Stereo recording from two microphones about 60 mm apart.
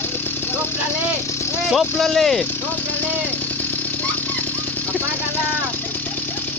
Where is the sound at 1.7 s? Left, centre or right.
Centre.